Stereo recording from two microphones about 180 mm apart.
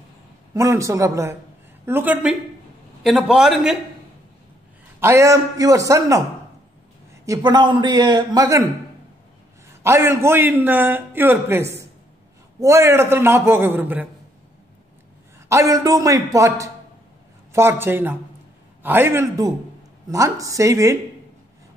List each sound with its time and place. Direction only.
0.6 s a man's voice: 15° right (ahead or behind)
5.0 s a man's voice: 15° right (ahead or behind)
7.2 s a man's voice: 25° right (ahead or behind)
9.8 s a man's voice: 15° right (ahead or behind)
15.4 s a man's voice: 15° right (ahead or behind)